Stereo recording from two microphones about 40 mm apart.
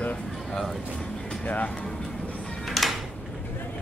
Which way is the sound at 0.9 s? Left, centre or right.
Left.